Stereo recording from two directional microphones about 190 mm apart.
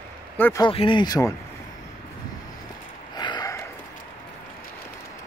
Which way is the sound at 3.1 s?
20° left (ahead or behind).